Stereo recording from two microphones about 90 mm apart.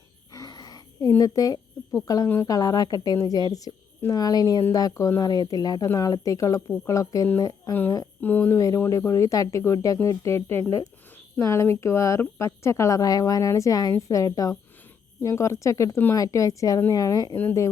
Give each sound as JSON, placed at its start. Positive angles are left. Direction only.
{"t": 0.4, "sound": "a sound", "side_deg": 45}
{"t": 1.2, "sound": "a woman's voice", "side_deg": 45}
{"t": 8.2, "sound": "speech", "side_deg": 20}
{"t": 8.5, "sound": "a woman's voice", "side_deg": 35}